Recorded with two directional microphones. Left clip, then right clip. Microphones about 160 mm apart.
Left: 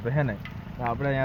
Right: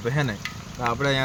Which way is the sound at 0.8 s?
45° right (ahead or behind).